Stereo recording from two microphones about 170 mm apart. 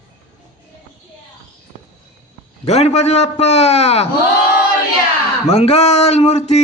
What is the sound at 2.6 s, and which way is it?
A man's voice, 40° left (ahead or behind).